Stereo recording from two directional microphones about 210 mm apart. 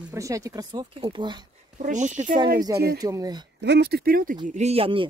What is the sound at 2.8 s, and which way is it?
Speech, 15° right (ahead or behind).